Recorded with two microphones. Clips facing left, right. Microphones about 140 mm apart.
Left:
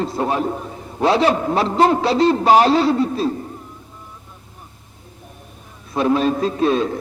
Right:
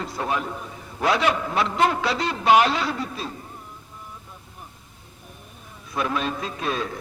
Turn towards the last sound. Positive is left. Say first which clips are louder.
# left 10 dB
turn(degrees=30)  # may be behind; listen again after turning